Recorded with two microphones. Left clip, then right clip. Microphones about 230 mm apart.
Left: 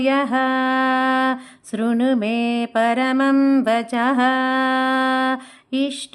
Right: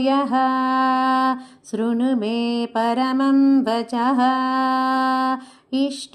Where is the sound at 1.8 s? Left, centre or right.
Centre.